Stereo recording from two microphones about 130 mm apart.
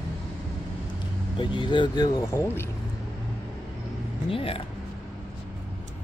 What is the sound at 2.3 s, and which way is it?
Speech, 20° left (ahead or behind).